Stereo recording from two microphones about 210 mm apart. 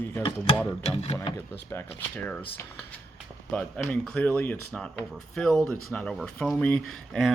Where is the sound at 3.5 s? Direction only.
5° left (ahead or behind).